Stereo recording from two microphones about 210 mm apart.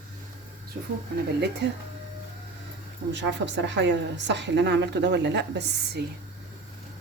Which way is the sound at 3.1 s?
60° right (ahead or behind).